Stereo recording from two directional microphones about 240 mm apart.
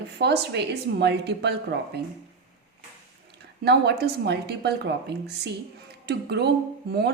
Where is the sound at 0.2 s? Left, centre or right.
Right.